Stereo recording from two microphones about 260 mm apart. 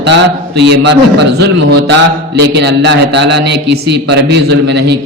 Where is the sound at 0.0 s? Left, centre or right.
Right.